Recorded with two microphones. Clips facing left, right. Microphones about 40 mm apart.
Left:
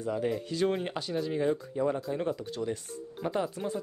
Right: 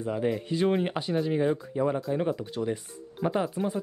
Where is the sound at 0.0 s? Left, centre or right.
Centre.